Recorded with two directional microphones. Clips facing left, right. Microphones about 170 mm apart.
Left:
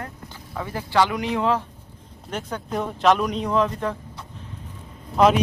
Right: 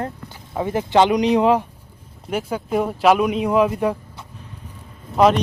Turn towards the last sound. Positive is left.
turn(degrees=-5)  # may be behind; listen again after turning